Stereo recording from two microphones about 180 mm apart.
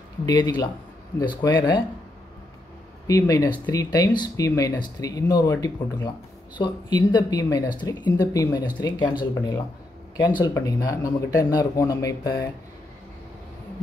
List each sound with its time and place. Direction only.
0.2 s speech: 25° left (ahead or behind)
3.1 s speech: 20° left (ahead or behind)